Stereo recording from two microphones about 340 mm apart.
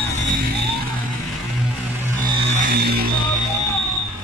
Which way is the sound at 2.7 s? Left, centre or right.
Right.